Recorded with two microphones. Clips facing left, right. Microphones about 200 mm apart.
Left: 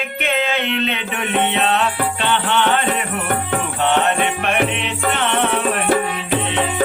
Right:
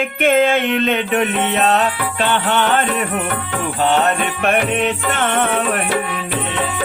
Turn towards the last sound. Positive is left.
turn(degrees=-45)  # may be behind; listen again after turning